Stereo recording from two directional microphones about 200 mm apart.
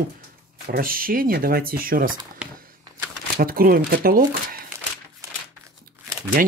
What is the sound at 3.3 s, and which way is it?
Speech, 45° right (ahead or behind).